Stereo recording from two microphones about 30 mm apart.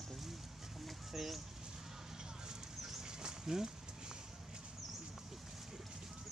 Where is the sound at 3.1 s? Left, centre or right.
Right.